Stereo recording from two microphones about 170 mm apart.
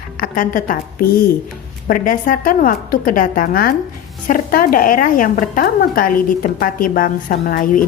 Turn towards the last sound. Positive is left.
turn(degrees=55)  # may be behind; listen again after turning